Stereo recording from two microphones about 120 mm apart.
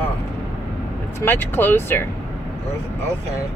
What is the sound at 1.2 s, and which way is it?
Speech, 15° left (ahead or behind).